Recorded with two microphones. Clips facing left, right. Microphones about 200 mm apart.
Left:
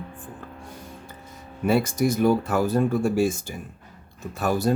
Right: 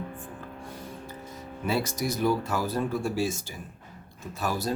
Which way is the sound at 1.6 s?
55° left (ahead or behind).